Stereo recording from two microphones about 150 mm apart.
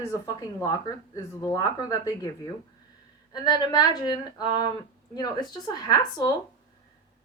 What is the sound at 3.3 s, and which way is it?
Speech, 30° left (ahead or behind).